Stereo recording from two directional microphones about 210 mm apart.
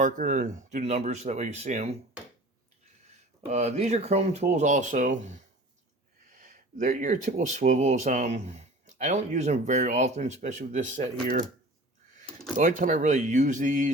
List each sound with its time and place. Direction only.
0.0 s speech: 35° right (ahead or behind)
3.5 s speech: 35° right (ahead or behind)
12.5 s speech: 40° right (ahead or behind)